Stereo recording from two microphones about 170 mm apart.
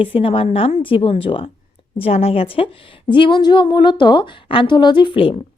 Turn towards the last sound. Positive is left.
turn(degrees=30)  # may be behind; listen again after turning